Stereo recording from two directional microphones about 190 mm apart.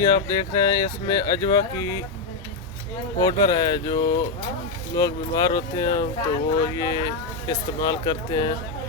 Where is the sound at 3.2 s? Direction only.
20° left (ahead or behind).